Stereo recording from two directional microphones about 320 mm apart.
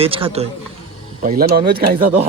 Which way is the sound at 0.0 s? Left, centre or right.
Centre.